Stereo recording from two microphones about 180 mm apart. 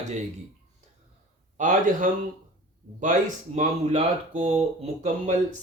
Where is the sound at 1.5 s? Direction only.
45° right (ahead or behind).